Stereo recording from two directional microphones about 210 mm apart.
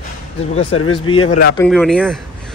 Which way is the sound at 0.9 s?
25° left (ahead or behind).